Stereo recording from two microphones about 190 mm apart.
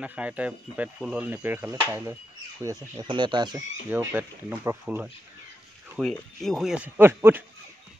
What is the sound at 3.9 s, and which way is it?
Speech, 10° right (ahead or behind).